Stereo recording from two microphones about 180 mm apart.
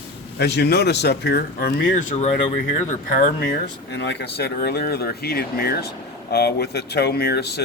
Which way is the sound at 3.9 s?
75° left (ahead or behind).